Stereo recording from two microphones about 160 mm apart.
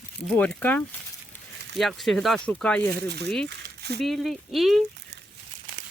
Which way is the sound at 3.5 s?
90° right.